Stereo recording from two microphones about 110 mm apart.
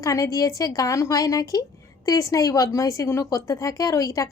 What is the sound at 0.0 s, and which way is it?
A woman's voice, 30° left (ahead or behind).